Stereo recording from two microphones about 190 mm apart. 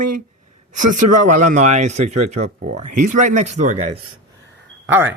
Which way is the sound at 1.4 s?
40° right (ahead or behind).